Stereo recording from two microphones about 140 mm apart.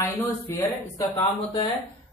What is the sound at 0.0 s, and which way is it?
A man's voice, 20° left (ahead or behind).